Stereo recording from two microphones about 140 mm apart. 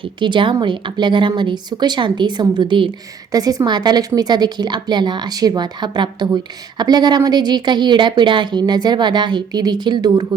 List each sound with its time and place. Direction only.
0.0 s a woman's voice: 35° right (ahead or behind)